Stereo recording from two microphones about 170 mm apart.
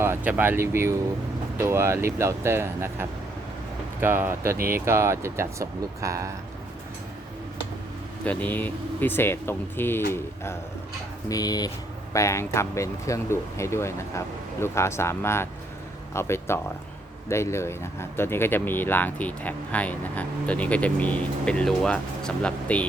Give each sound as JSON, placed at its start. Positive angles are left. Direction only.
{"t": 0.0, "sound": "speech", "side_deg": -10}
{"t": 8.2, "sound": "speech", "side_deg": 10}
{"t": 11.3, "sound": "speech", "side_deg": 20}